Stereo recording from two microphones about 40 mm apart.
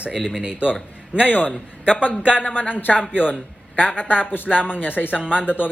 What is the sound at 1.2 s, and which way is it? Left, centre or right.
Speech, left.